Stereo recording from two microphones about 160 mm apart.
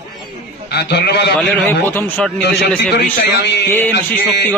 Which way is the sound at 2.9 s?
90° left.